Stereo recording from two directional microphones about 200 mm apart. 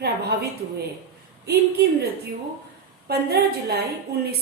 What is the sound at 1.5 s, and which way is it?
Speech, 50° right (ahead or behind).